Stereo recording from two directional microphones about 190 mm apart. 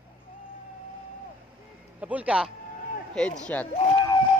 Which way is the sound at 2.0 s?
10° right (ahead or behind).